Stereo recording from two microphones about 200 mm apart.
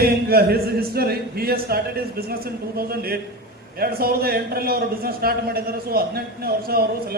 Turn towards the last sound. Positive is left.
turn(degrees=-50)  # may be behind; listen again after turning